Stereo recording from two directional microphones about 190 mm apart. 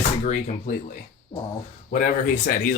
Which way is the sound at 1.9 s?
45° left (ahead or behind).